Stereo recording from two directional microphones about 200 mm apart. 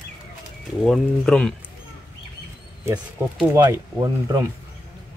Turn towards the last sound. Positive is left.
turn(degrees=-20)  # may be behind; listen again after turning